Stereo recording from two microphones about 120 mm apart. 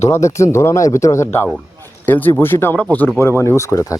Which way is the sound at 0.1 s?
25° left (ahead or behind).